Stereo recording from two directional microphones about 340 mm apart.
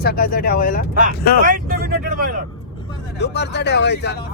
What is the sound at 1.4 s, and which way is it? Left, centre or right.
Speech, right.